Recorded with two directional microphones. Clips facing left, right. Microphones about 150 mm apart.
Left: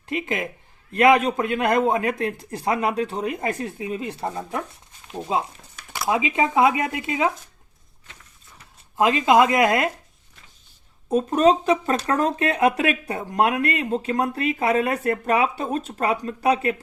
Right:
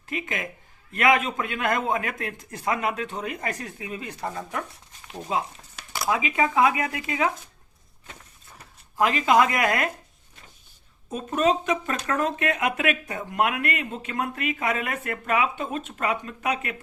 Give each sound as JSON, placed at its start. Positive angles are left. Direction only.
{"t": 0.1, "sound": "a sound", "side_deg": 25}
{"t": 0.9, "sound": "a man's voice", "side_deg": 30}
{"t": 9.0, "sound": "a man's voice", "side_deg": 20}
{"t": 11.1, "sound": "speech", "side_deg": 35}